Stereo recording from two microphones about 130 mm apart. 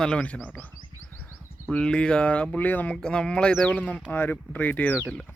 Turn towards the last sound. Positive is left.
turn(degrees=10)  # may be behind; listen again after turning